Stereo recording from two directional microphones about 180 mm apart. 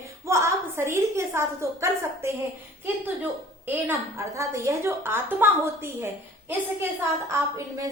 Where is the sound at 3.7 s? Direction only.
15° right (ahead or behind).